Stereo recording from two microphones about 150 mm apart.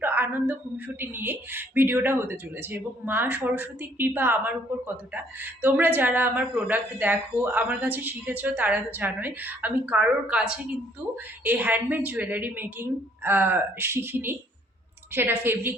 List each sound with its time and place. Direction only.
0.0 s a sound: 15° right (ahead or behind)
0.9 s a woman's voice: 15° right (ahead or behind)
11.4 s a woman's voice: 10° right (ahead or behind)